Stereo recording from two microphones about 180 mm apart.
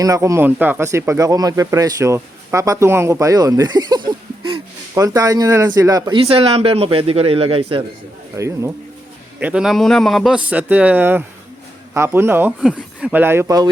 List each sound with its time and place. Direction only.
0.0 s speech: 15° right (ahead or behind)
6.1 s a man's voice: 30° right (ahead or behind)
8.4 s speech: 15° right (ahead or behind)
12.5 s speech: centre (ahead or behind); by 13.7 s 15° right (ahead or behind)